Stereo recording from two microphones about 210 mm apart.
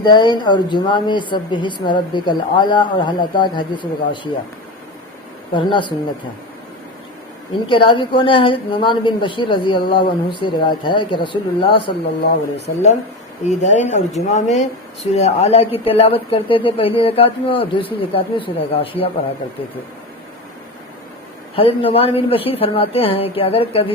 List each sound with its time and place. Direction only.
0.0 s speech: 20° left (ahead or behind)
5.5 s speech: 20° left (ahead or behind)
7.7 s speech: 25° left (ahead or behind)
21.5 s speech: 25° left (ahead or behind)